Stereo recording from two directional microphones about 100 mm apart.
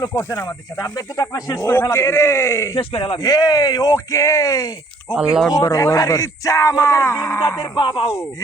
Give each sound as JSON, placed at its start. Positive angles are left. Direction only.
{"t": 0.1, "sound": "speech", "side_deg": 25}
{"t": 0.4, "sound": "speech", "side_deg": 35}
{"t": 2.7, "sound": "speech", "side_deg": 65}
{"t": 3.2, "sound": "speech", "side_deg": 35}
{"t": 5.0, "sound": "speech", "side_deg": 5}
{"t": 5.5, "sound": "speech", "side_deg": 35}